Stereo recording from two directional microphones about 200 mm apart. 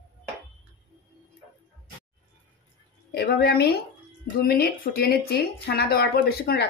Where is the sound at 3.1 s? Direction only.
50° left (ahead or behind).